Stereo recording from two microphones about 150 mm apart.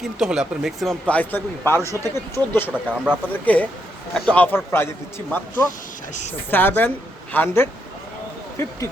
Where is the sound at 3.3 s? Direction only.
10° left (ahead or behind).